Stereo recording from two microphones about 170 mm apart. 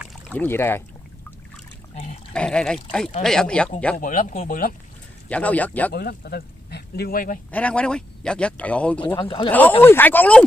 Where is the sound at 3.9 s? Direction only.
55° left (ahead or behind).